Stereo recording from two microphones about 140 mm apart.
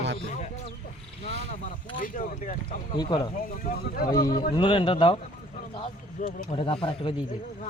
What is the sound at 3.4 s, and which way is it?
Speech, 75° left (ahead or behind).